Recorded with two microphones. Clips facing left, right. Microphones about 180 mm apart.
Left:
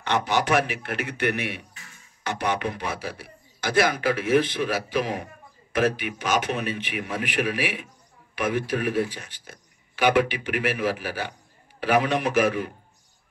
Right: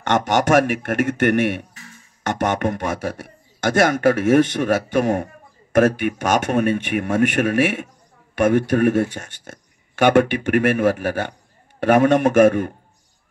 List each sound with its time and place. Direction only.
0.7 s a man's voice: 50° right (ahead or behind)